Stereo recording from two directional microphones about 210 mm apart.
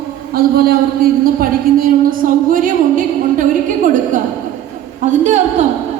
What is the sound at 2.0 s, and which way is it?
A woman's voice, 40° right (ahead or behind).